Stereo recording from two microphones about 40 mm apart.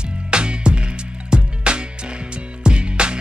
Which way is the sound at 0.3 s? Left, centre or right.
Right.